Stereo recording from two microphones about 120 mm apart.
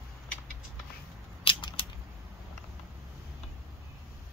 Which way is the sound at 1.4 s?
45° left (ahead or behind).